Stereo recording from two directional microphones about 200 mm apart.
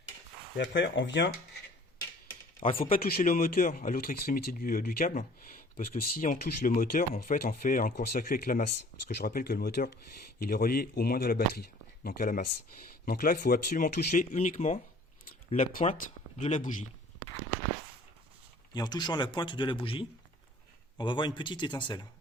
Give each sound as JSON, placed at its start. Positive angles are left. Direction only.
{"t": 0.5, "sound": "speech", "side_deg": 65}
{"t": 2.7, "sound": "speech", "side_deg": 45}
{"t": 18.7, "sound": "speech", "side_deg": 20}